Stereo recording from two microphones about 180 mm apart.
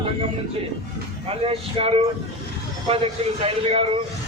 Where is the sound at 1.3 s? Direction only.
30° right (ahead or behind).